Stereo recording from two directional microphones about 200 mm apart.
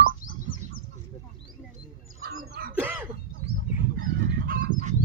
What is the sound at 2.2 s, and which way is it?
Bird, 50° right (ahead or behind).